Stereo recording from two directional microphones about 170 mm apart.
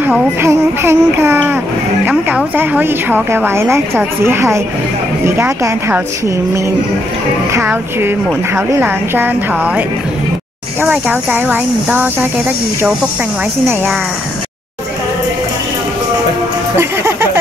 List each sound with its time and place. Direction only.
0.0 s a woman's voice: 10° right (ahead or behind)
10.8 s a woman's voice: 10° right (ahead or behind)
16.7 s a woman's voice: 15° right (ahead or behind)